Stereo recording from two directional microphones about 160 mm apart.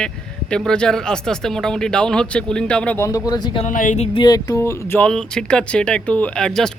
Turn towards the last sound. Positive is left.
turn(degrees=5)  # may be behind; listen again after turning